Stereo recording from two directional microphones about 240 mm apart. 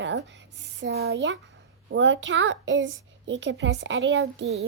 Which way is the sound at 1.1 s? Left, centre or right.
Right.